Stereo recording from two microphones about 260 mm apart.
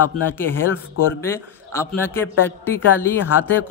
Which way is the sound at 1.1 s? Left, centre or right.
Centre.